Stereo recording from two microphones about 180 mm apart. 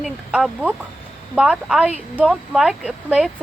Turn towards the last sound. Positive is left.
turn(degrees=-5)  # may be behind; listen again after turning